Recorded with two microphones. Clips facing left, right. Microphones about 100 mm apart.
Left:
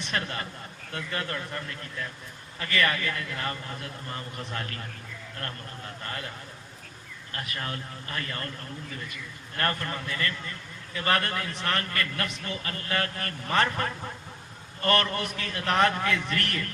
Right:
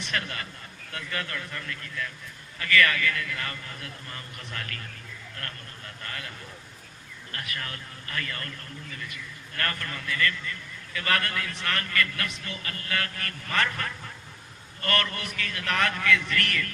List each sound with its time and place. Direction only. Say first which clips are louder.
0.1 s a man's voice: left 2 dB; 30° left (ahead or behind)
6.0 s a man's voice: left 2 dB; 30° left (ahead or behind)
7.3 s a man's voice: left 2 dB; 30° left (ahead or behind)
9.6 s a man's voice: left 3 dB; 30° left (ahead or behind)